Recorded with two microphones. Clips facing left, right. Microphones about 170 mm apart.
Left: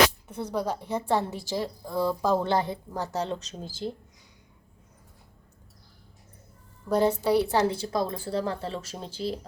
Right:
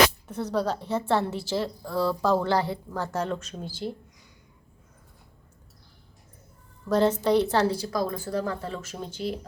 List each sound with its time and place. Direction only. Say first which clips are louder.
0.3 s a woman's voice: right 2 dB; 10° left (ahead or behind)
6.8 s a woman's voice: right 1 dB; 10° left (ahead or behind)
7.8 s speech: even; 25° left (ahead or behind)